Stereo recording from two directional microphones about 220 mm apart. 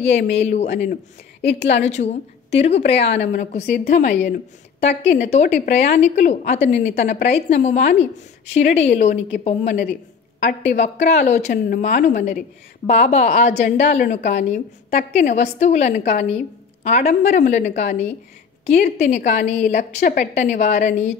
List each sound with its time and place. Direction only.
0.0 s speech: 30° left (ahead or behind)
1.4 s a woman's voice: 50° left (ahead or behind)
1.8 s speech: 30° left (ahead or behind)
13.5 s a woman's voice: 45° left (ahead or behind)
13.7 s speech: 30° left (ahead or behind)